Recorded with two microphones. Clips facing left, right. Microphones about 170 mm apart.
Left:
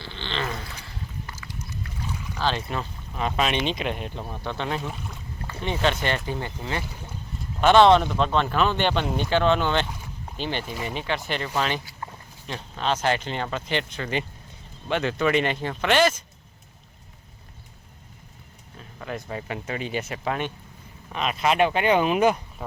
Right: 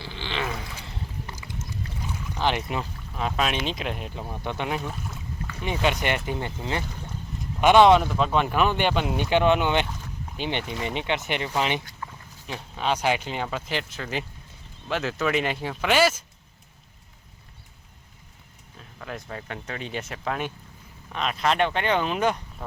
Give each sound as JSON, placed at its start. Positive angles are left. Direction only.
{"t": 0.0, "sound": "a sound", "side_deg": -10}
{"t": 1.3, "sound": "horse", "side_deg": -25}
{"t": 2.3, "sound": "speech", "side_deg": -15}
{"t": 3.2, "sound": "speech", "side_deg": 0}
{"t": 4.8, "sound": "speech", "side_deg": 0}
{"t": 5.6, "sound": "speech", "side_deg": -10}
{"t": 18.8, "sound": "speech", "side_deg": 0}